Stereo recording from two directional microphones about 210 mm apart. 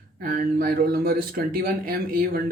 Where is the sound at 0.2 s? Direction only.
40° right (ahead or behind).